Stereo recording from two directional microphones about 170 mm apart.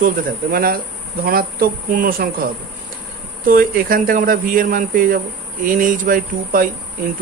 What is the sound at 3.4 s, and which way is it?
Speech, 60° right (ahead or behind).